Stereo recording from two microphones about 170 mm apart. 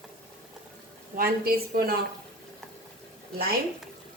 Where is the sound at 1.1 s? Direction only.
60° right (ahead or behind).